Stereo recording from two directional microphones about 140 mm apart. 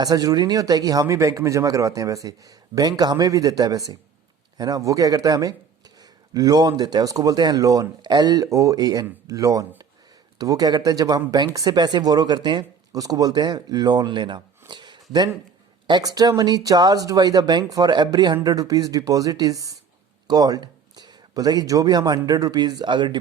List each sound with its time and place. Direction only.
0.0 s speech: 25° right (ahead or behind)
14.7 s a sound: 35° right (ahead or behind)
15.9 s speech: 30° right (ahead or behind)